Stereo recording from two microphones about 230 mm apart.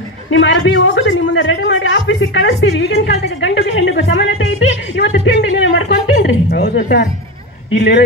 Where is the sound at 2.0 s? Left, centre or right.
Left.